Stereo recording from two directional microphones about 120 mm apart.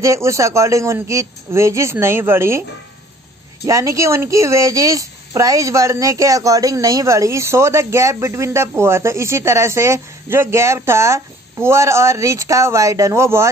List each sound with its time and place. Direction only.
0.0 s speech: 25° right (ahead or behind)
3.6 s speech: 25° right (ahead or behind)